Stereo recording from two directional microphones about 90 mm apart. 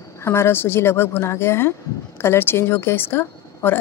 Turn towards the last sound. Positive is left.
turn(degrees=25)  # may be behind; listen again after turning